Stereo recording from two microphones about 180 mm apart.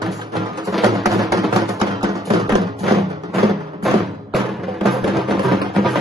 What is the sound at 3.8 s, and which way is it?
Music, centre (ahead or behind).